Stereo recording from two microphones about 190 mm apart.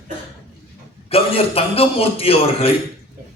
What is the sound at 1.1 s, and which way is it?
A man's voice, 30° left (ahead or behind).